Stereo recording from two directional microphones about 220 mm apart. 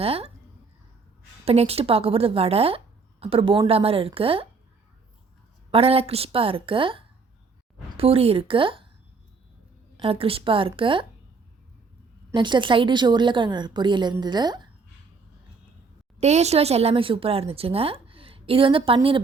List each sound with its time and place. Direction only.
0.0 s a woman's voice: 25° right (ahead or behind)
1.5 s a woman's voice: 25° right (ahead or behind)
5.7 s a woman's voice: 25° right (ahead or behind)
10.0 s a woman's voice: 25° right (ahead or behind)
12.3 s a woman's voice: 20° right (ahead or behind)
16.2 s a woman's voice: 30° right (ahead or behind)